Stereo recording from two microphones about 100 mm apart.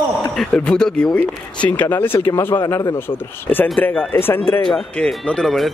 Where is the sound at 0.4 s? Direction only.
10° left (ahead or behind).